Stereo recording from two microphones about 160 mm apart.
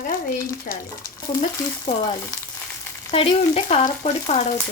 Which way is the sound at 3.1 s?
35° left (ahead or behind).